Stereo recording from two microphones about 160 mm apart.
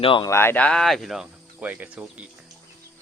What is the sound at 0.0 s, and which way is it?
Speech, 35° left (ahead or behind).